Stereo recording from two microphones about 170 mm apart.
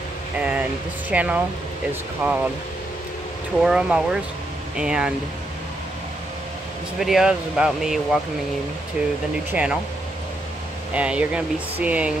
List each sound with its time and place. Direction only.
0.4 s speech: 5° right (ahead or behind)
3.6 s speech: 5° right (ahead or behind)
7.0 s speech: centre (ahead or behind)
9.5 s speech: 5° right (ahead or behind)
10.9 s speech: 5° right (ahead or behind)